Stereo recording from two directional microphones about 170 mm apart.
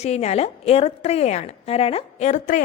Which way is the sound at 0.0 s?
40° left (ahead or behind).